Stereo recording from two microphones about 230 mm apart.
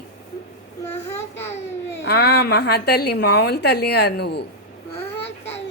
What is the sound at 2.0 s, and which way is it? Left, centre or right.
A woman's voice, left.